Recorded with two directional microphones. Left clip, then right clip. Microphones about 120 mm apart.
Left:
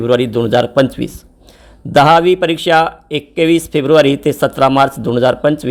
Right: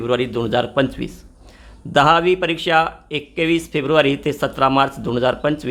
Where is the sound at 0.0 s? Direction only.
40° left (ahead or behind).